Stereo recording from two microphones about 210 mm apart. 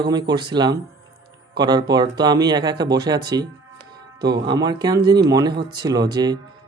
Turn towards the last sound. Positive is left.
turn(degrees=-20)  # may be behind; listen again after turning